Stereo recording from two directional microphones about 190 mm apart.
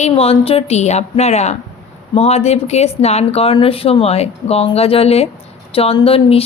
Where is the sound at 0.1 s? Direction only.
30° left (ahead or behind).